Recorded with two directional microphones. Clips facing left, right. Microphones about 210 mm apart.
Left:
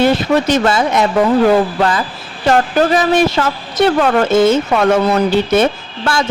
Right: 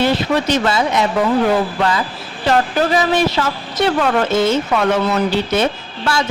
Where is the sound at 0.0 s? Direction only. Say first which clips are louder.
Left 4 dB; 50° left (ahead or behind).